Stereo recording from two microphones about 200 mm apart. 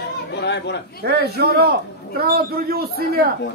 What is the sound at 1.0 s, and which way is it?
Speech, 55° right (ahead or behind).